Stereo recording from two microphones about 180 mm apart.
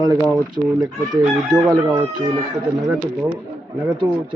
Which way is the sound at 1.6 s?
20° right (ahead or behind).